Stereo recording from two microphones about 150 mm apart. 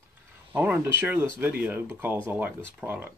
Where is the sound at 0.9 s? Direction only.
15° right (ahead or behind).